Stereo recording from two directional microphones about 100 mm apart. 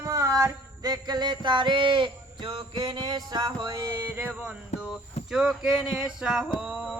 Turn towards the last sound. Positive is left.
turn(degrees=-10)  # may be behind; listen again after turning